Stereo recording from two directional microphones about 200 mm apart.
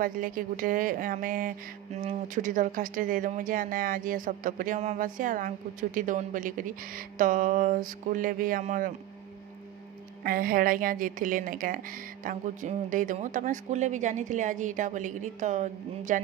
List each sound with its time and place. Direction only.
0.0 s speech: 45° right (ahead or behind)
10.2 s speech: 45° right (ahead or behind)